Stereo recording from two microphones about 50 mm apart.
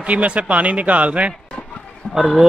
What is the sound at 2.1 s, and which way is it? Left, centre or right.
Speech, centre.